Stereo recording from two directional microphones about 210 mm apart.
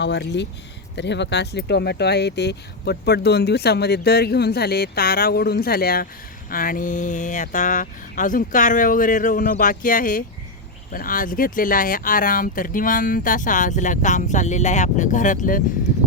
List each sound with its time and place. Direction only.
0.0 s speech: 55° left (ahead or behind); by 15.6 s 40° left (ahead or behind)